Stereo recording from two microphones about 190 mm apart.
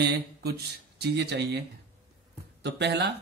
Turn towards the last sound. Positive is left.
turn(degrees=-60)  # may be behind; listen again after turning